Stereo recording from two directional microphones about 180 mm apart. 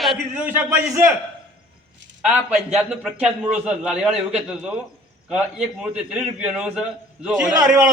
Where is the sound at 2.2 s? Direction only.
5° right (ahead or behind).